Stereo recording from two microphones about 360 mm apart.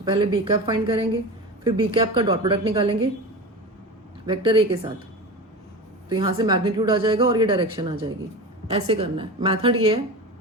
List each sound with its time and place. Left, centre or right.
0.0 s speech: centre
4.3 s speech: centre
6.1 s speech: centre